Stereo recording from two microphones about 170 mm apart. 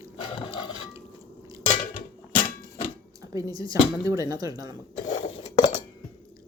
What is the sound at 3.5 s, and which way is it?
Speech, 20° right (ahead or behind).